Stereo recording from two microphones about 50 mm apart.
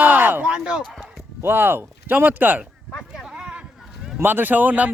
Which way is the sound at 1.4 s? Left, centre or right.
Right.